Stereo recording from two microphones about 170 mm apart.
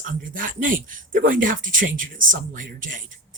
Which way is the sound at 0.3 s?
55° right (ahead or behind).